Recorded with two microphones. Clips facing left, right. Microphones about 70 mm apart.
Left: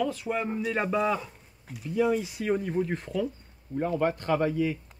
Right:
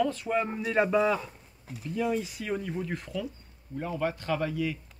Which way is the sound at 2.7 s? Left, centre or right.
Left.